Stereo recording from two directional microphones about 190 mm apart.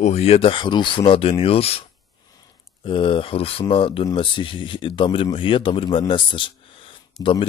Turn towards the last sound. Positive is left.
turn(degrees=25)  # may be behind; listen again after turning